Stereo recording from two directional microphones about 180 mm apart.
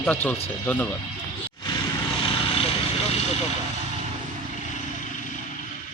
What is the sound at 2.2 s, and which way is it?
Vehicle, 30° left (ahead or behind).